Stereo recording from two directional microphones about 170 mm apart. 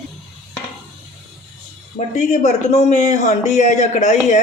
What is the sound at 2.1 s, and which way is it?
Speech, 45° left (ahead or behind).